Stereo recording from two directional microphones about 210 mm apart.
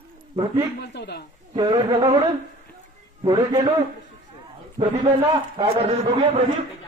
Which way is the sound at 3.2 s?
20° right (ahead or behind).